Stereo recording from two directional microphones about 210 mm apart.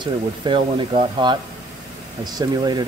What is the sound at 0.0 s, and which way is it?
Speech, 25° right (ahead or behind).